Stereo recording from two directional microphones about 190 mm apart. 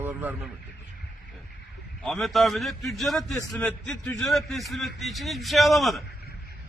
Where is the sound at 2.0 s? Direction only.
Centre (ahead or behind).